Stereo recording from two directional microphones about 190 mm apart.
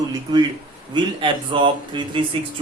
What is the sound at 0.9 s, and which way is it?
Speech, 25° right (ahead or behind).